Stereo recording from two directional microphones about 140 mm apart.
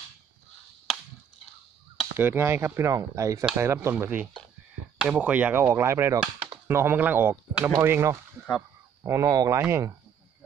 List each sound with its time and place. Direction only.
2.1 s speech: 15° right (ahead or behind)